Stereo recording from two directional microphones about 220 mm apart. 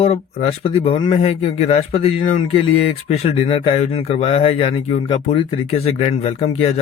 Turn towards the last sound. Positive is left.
turn(degrees=30)  # may be behind; listen again after turning